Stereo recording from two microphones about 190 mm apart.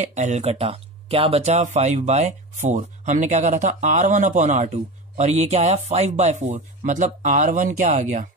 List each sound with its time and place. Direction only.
0.0 s speech: 35° right (ahead or behind)